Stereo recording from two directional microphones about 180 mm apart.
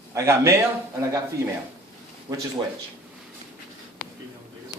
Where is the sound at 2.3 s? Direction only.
25° right (ahead or behind).